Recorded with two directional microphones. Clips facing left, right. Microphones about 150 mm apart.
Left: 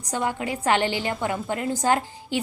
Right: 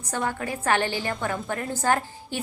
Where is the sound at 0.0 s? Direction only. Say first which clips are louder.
Left 2 dB; 15° left (ahead or behind).